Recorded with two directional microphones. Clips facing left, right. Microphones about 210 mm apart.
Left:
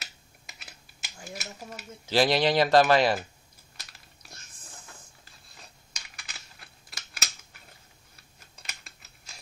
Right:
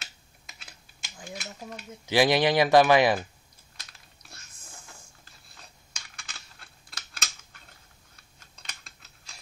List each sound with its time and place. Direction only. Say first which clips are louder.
0.0 s typing: left 1 dB; 5° left (ahead or behind)
2.0 s speech: right 1 dB; 15° right (ahead or behind)
5.9 s a sound: even; 5° left (ahead or behind)
8.6 s typing: even; 5° left (ahead or behind)